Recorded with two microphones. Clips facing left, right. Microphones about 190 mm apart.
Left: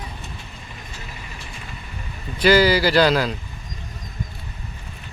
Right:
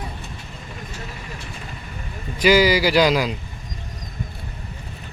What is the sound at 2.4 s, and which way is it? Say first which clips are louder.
Speech: even; 10° right (ahead or behind).